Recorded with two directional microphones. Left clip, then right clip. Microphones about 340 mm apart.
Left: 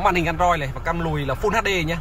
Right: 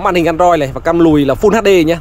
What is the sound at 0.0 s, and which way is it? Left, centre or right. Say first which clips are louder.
Speech: right 8 dB; centre.